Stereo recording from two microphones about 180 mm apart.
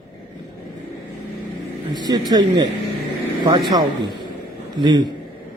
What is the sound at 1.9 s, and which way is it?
Speech, 25° right (ahead or behind).